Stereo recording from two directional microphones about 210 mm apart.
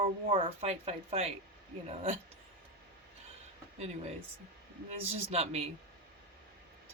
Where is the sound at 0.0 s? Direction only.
25° right (ahead or behind).